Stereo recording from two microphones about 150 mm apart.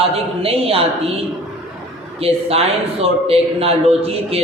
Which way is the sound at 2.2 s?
40° right (ahead or behind).